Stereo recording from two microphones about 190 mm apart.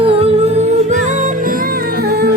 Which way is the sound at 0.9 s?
40° right (ahead or behind).